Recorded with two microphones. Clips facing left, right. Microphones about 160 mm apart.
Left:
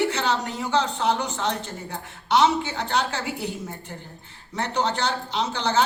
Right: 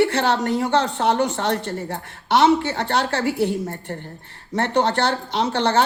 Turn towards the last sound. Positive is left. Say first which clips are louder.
# right 4 dB
turn(degrees=-60)  # may be behind; listen again after turning